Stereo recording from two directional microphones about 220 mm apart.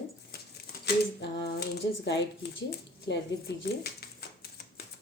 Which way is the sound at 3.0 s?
50° left (ahead or behind).